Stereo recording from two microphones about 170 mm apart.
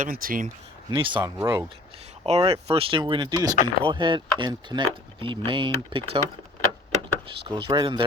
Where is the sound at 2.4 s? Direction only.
25° right (ahead or behind).